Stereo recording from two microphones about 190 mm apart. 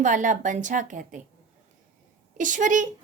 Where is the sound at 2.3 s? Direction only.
40° right (ahead or behind).